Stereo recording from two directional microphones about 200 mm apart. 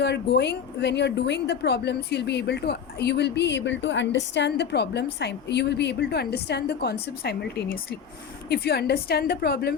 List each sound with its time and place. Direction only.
0.0 s a woman's voice: 55° left (ahead or behind)